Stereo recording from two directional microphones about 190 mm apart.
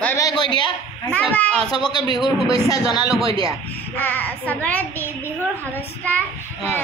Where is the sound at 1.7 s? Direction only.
20° left (ahead or behind).